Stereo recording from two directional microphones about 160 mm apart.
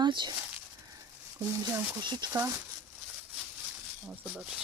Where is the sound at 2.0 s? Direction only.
25° right (ahead or behind).